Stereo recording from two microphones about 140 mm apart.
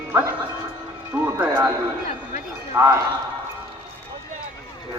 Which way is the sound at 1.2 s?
15° right (ahead or behind).